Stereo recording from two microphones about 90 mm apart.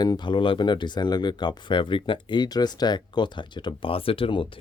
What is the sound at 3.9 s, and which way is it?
Speech, 90° left.